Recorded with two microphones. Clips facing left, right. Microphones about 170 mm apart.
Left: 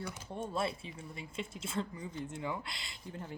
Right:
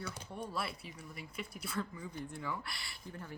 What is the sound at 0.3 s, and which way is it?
Speech, 25° left (ahead or behind).